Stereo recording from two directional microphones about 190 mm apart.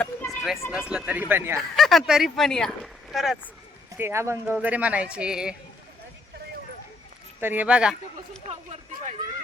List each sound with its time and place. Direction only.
0.0 s a sound: 5° left (ahead or behind)
0.7 s speech: 5° right (ahead or behind)
1.5 s speech: centre (ahead or behind)
3.9 s speech: 15° right (ahead or behind)
7.4 s speech: 10° right (ahead or behind)
8.4 s speech: 35° right (ahead or behind)